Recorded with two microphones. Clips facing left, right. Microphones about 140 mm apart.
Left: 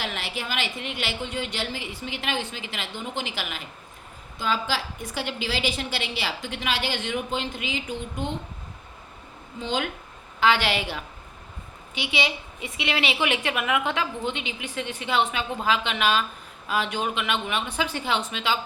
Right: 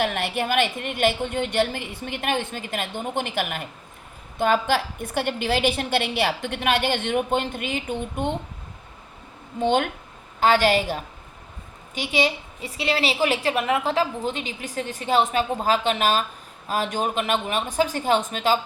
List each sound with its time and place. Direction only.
0.0 s a woman's voice: 55° right (ahead or behind)
9.6 s a woman's voice: 55° right (ahead or behind)
10.4 s a woman's voice: 45° right (ahead or behind)